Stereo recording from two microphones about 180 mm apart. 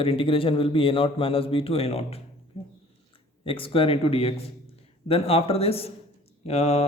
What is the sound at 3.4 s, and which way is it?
Speech, 30° left (ahead or behind).